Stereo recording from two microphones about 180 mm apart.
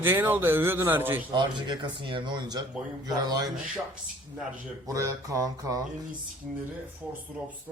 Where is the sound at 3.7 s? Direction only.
5° right (ahead or behind).